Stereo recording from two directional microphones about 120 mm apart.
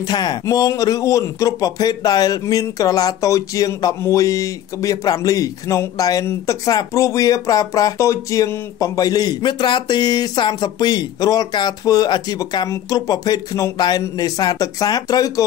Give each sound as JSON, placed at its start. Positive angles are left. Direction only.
{"t": 0.0, "sound": "speech", "side_deg": 35}